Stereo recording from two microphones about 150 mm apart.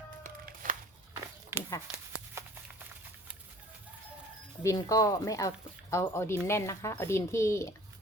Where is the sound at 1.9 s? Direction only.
20° right (ahead or behind).